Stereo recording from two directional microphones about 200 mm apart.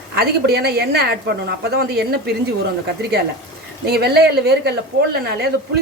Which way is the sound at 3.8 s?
55° right (ahead or behind).